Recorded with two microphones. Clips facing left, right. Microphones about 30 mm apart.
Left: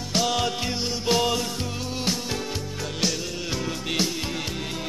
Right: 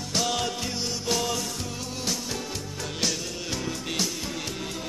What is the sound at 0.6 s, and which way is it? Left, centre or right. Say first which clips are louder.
Music: left 3 dB; left.